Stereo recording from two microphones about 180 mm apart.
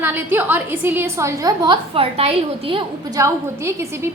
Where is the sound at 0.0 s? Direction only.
10° right (ahead or behind); by 2.8 s 30° right (ahead or behind).